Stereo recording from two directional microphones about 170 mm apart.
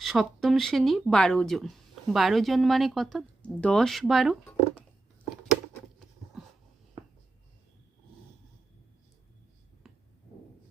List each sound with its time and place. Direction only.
0.0 s speech: centre (ahead or behind)
7.0 s writing: 30° right (ahead or behind)
9.8 s a sound: centre (ahead or behind)